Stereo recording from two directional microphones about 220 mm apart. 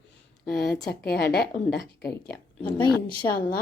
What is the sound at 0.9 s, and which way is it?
A woman's voice, 45° left (ahead or behind).